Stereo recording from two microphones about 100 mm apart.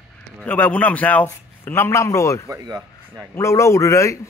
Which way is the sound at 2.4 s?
40° right (ahead or behind).